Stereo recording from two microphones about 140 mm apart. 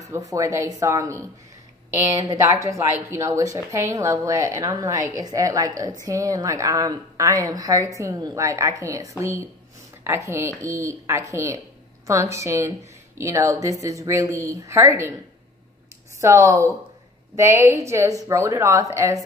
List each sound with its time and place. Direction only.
0.0 s a woman's voice: 25° right (ahead or behind)
16.2 s speech: 20° right (ahead or behind)